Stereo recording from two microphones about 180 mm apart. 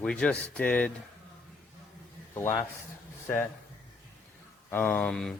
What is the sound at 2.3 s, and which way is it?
Speech, 15° left (ahead or behind).